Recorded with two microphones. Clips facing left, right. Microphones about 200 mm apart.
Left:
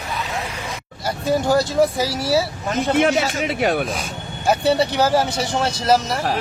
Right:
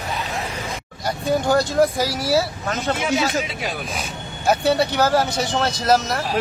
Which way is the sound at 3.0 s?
60° left (ahead or behind).